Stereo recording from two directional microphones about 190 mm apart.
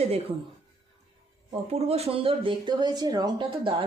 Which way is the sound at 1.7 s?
35° right (ahead or behind).